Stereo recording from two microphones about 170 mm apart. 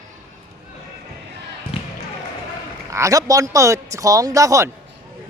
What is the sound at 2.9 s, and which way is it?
Speech, 20° right (ahead or behind).